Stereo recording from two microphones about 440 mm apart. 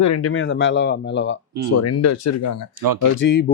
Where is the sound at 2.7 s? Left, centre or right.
Right.